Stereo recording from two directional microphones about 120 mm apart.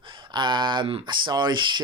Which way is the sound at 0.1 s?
40° right (ahead or behind).